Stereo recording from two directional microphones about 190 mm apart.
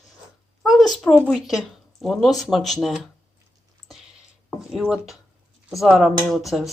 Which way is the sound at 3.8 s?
35° left (ahead or behind).